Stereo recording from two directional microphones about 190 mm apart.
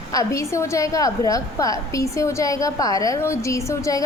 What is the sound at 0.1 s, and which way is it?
A woman's voice, 15° left (ahead or behind).